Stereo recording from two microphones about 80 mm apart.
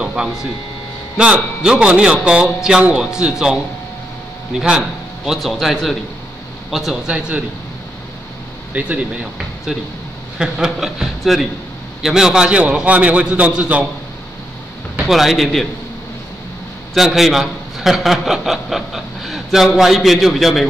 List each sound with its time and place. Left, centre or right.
0.0 s a man's voice: centre
4.6 s a man's voice: centre
7.1 s a man's voice: centre
8.7 s a man's voice: centre
15.0 s a man's voice: centre
16.9 s a man's voice: centre